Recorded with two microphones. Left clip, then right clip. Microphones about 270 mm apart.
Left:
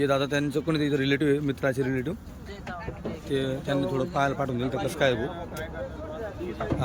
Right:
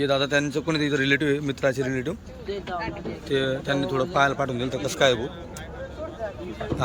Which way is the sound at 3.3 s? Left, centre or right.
Centre.